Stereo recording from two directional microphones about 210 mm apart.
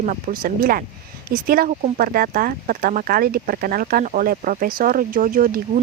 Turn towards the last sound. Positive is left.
turn(degrees=-40)  # may be behind; listen again after turning